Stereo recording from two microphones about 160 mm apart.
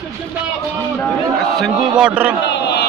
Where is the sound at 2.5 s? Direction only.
90° left.